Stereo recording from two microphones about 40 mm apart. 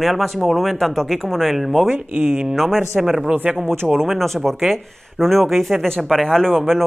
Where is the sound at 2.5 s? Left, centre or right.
Centre.